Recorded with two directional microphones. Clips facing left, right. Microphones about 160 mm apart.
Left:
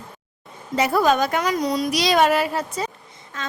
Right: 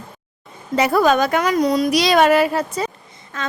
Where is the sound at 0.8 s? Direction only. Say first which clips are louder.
Right 3 dB; 70° right (ahead or behind).